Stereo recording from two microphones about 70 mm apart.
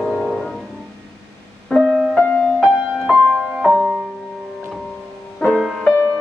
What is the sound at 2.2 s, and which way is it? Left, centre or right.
Music, centre.